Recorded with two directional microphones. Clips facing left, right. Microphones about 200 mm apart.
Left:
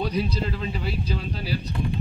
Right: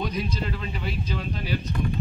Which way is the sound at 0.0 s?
35° left (ahead or behind).